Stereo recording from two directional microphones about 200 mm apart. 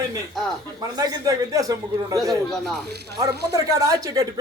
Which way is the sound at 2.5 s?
Centre (ahead or behind).